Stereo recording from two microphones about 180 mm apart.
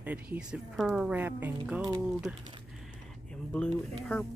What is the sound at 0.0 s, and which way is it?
Speech, 10° right (ahead or behind).